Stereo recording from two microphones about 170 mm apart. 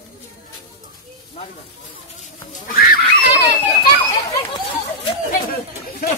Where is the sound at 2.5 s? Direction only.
55° left (ahead or behind).